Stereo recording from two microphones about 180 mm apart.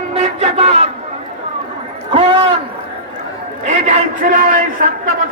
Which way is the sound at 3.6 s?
40° right (ahead or behind).